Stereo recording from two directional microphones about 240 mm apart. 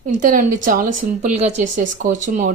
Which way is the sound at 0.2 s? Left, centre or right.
Right.